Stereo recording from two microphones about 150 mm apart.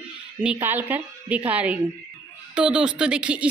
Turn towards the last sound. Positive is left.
turn(degrees=-10)  # may be behind; listen again after turning